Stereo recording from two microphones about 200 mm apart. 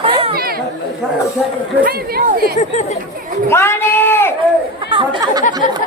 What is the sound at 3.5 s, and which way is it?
Speech, 10° left (ahead or behind).